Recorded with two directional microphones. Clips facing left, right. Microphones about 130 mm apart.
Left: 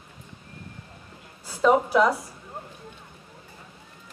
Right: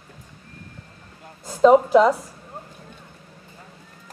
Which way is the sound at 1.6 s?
30° right (ahead or behind).